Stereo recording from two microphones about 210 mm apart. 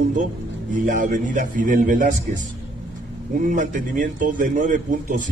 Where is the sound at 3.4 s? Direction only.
40° right (ahead or behind).